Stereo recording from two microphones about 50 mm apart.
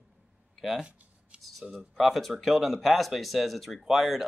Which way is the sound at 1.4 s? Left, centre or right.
Centre.